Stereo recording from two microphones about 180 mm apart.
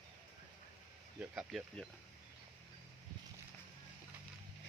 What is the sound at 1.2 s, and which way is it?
Speech, 5° right (ahead or behind).